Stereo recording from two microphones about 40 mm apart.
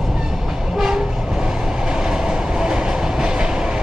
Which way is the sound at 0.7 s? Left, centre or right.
Centre.